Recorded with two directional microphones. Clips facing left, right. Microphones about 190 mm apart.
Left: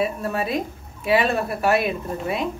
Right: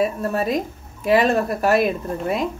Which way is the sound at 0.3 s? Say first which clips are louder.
Right 3 dB; 40° right (ahead or behind).